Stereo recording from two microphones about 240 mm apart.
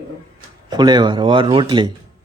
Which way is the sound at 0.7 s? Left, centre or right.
Centre.